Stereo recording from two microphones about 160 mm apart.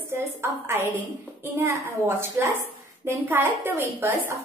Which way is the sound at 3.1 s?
15° right (ahead or behind).